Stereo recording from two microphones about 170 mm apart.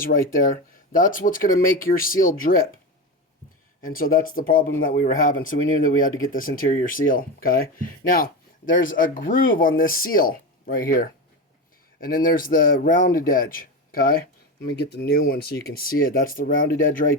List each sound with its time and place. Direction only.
0.1 s speech: 55° left (ahead or behind)
3.8 s a man's voice: 55° left (ahead or behind)
9.3 s a man's voice: 55° left (ahead or behind)